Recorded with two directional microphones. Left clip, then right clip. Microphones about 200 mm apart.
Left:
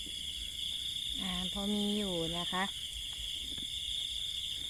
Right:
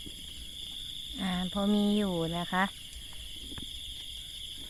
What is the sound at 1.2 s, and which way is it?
Speech, 35° right (ahead or behind).